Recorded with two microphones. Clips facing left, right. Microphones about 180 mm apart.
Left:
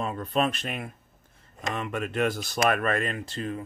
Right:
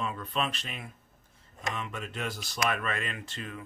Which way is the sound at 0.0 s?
40° left (ahead or behind).